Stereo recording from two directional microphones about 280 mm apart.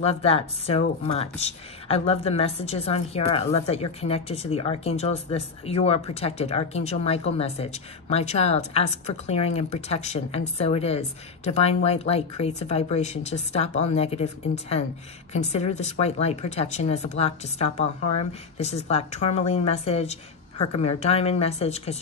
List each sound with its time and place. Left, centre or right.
0.0 s speech: left